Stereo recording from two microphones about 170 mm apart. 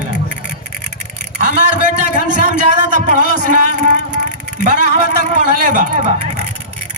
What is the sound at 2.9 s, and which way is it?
Music, 45° right (ahead or behind).